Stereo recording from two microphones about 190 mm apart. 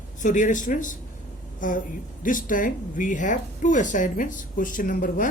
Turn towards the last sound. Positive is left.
turn(degrees=45)  # may be behind; listen again after turning